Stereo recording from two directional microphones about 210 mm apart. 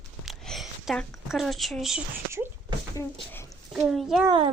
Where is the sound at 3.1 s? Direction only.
10° left (ahead or behind).